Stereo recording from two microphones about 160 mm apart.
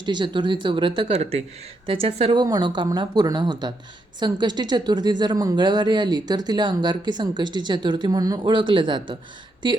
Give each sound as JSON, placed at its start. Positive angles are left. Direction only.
{"t": 0.0, "sound": "speech", "side_deg": -30}